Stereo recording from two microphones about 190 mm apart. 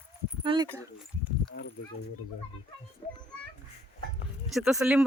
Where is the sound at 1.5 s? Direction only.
55° left (ahead or behind).